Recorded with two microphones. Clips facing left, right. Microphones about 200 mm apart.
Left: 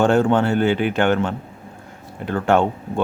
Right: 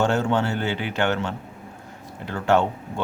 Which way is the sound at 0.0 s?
50° left (ahead or behind).